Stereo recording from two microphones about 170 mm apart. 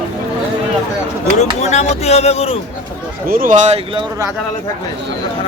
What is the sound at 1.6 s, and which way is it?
Speech, 40° left (ahead or behind).